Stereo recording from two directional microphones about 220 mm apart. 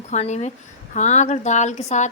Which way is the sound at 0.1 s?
30° left (ahead or behind).